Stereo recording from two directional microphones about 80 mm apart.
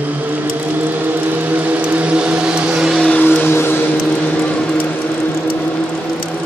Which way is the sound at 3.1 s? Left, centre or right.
Left.